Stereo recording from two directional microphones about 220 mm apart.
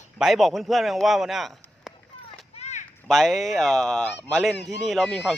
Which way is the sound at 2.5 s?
30° left (ahead or behind).